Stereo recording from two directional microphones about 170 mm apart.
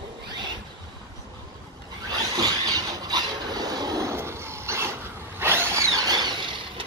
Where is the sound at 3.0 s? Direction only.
25° right (ahead or behind).